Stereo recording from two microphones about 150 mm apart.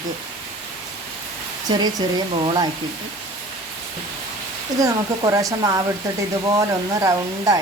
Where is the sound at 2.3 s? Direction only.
30° right (ahead or behind).